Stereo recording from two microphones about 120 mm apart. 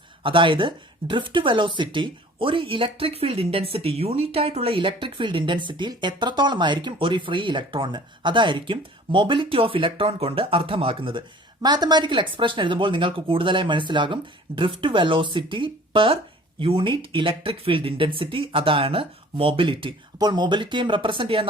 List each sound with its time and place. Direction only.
0.2 s speech: 45° right (ahead or behind)
11.6 s speech: 35° right (ahead or behind)
20.1 s speech: 35° right (ahead or behind)